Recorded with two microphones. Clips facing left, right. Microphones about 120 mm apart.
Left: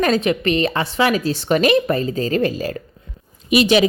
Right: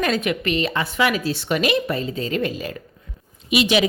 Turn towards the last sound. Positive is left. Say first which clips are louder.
# left 4 dB
turn(degrees=40)  # may be behind; listen again after turning